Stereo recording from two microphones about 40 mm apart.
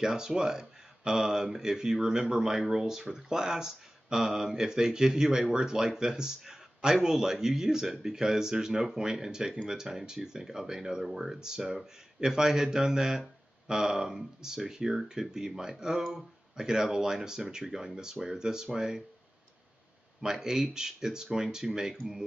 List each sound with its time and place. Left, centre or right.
0.0 s speech: centre
16.0 s speech: centre
16.5 s speech: centre
20.2 s speech: centre